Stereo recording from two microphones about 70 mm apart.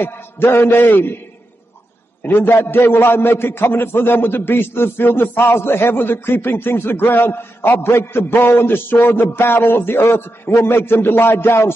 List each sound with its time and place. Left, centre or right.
0.0 s a man's voice: left
2.2 s a man's voice: left